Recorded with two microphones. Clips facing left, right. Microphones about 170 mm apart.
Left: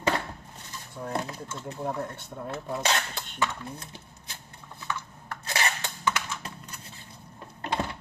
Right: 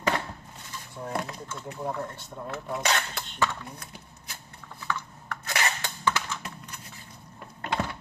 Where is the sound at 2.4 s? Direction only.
30° left (ahead or behind).